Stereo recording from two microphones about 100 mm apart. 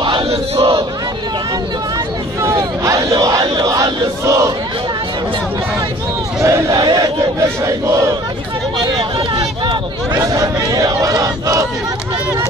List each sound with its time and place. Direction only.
0.3 s battle cry: 75° right (ahead or behind)
2.4 s battle cry: 30° right (ahead or behind)
3.6 s crowd: 35° right (ahead or behind)
6.4 s crowd: 30° right (ahead or behind)
6.8 s battle cry: 45° right (ahead or behind)
7.6 s battle cry: 30° right (ahead or behind)
10.1 s a sound: 35° right (ahead or behind)